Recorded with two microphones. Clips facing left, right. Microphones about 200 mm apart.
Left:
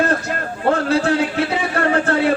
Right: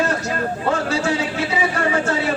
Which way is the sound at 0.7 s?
55° left (ahead or behind).